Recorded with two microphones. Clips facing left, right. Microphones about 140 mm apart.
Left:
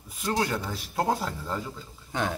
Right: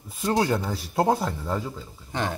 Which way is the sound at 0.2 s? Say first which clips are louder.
Right 5 dB; 25° right (ahead or behind).